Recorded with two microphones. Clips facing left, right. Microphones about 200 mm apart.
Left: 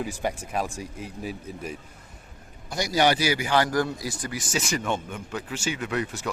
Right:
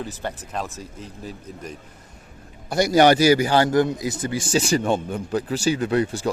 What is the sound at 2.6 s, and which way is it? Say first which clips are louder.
A man's voice: right 7 dB; 55° right (ahead or behind).